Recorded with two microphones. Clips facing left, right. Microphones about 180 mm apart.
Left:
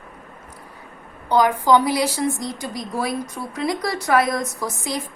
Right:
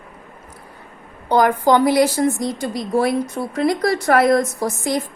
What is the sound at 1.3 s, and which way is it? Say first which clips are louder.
A woman's voice: right 2 dB; 50° right (ahead or behind).